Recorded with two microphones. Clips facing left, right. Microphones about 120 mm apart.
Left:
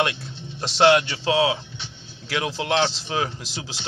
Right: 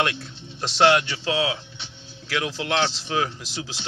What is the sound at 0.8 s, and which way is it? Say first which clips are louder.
Speech: left 2 dB; 30° left (ahead or behind).